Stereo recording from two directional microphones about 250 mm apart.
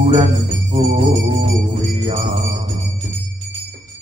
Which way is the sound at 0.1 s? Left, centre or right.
Right.